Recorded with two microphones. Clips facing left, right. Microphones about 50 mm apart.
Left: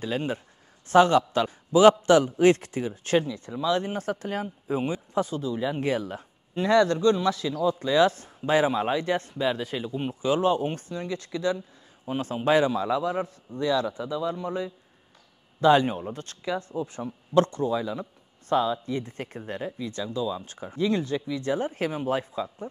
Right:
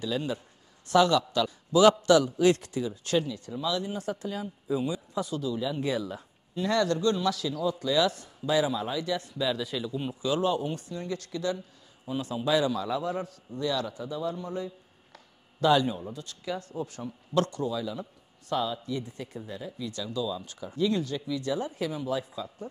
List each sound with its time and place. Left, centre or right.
0.0 s a man's voice: left
6.7 s a man's voice: left
12.1 s a man's voice: left
16.4 s a man's voice: left
19.8 s a man's voice: left